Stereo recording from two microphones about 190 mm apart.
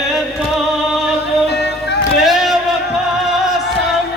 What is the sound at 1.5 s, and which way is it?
Music, 60° left (ahead or behind).